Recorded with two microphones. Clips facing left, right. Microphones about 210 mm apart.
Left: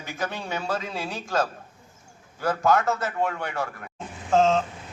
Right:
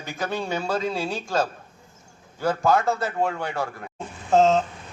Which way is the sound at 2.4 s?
30° right (ahead or behind).